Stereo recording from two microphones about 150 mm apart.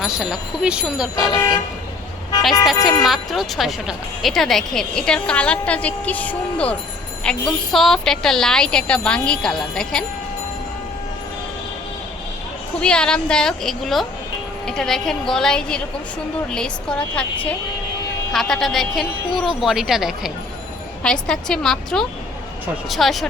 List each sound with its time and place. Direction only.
0.0 s speech: 5° right (ahead or behind)
1.1 s speech: 25° left (ahead or behind)
2.8 s speech: centre (ahead or behind)
12.8 s a woman's voice: 5° left (ahead or behind)